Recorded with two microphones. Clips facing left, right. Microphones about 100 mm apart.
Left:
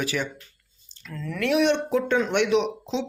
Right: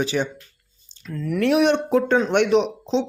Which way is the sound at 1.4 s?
45° right (ahead or behind).